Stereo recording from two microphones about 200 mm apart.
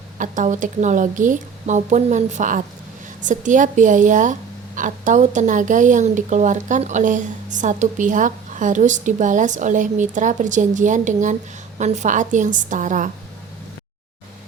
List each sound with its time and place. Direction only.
0.2 s a woman's voice: 40° right (ahead or behind)